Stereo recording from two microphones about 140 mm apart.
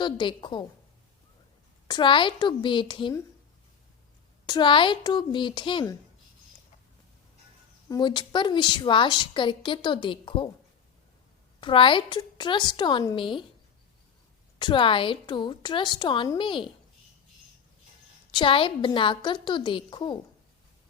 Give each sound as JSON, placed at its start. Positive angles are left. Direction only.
{"t": 0.0, "sound": "a woman's voice", "side_deg": 35}
{"t": 1.9, "sound": "a woman's voice", "side_deg": 35}
{"t": 4.4, "sound": "a woman's voice", "side_deg": 35}
{"t": 7.9, "sound": "a woman's voice", "side_deg": 30}
{"t": 11.6, "sound": "a woman's voice", "side_deg": 35}
{"t": 14.6, "sound": "a woman's voice", "side_deg": 35}
{"t": 18.3, "sound": "a woman's voice", "side_deg": 35}